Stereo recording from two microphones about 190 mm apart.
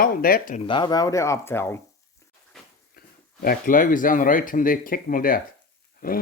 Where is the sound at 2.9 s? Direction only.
50° left (ahead or behind).